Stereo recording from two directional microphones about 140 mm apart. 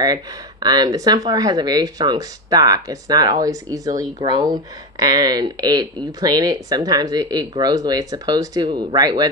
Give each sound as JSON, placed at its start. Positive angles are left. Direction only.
{"t": 0.0, "sound": "speech", "side_deg": -30}